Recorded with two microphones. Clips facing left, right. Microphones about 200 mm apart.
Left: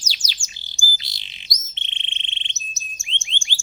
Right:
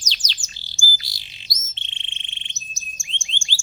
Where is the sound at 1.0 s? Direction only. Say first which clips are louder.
Left 1 dB; 20° left (ahead or behind).